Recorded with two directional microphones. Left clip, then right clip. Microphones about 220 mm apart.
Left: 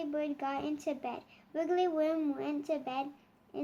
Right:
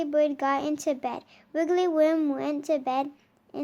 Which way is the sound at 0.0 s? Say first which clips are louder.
Right 11 dB; 45° right (ahead or behind).